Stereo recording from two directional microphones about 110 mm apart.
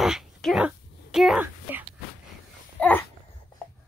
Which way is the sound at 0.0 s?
Centre (ahead or behind).